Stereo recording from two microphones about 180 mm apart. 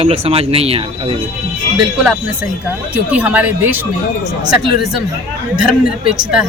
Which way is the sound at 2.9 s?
10° right (ahead or behind).